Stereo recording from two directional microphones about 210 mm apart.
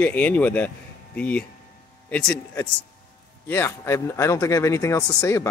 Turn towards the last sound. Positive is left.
turn(degrees=15)  # may be behind; listen again after turning